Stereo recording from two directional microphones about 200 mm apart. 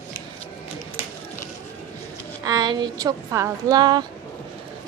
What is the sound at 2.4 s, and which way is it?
A woman's voice, 20° right (ahead or behind).